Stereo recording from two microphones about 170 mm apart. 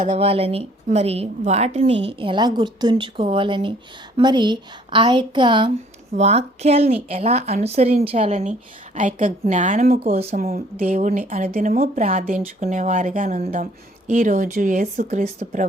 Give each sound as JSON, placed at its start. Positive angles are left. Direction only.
{"t": 0.1, "sound": "a woman's voice", "side_deg": -35}
{"t": 6.1, "sound": "speech", "side_deg": -40}
{"t": 10.2, "sound": "speech", "side_deg": -35}
{"t": 10.4, "sound": "speech", "side_deg": -55}
{"t": 11.4, "sound": "speech", "side_deg": -40}
{"t": 11.7, "sound": "speech", "side_deg": -55}